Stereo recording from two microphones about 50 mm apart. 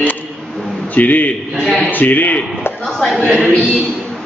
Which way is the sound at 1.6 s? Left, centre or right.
Centre.